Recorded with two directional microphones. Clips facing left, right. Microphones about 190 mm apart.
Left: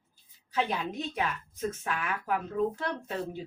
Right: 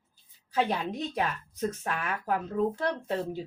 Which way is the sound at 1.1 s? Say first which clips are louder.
Right 2 dB; 40° right (ahead or behind).